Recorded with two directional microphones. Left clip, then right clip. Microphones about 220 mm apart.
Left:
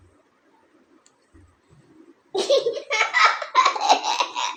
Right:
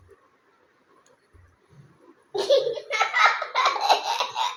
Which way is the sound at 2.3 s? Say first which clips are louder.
Left 1 dB; 15° left (ahead or behind).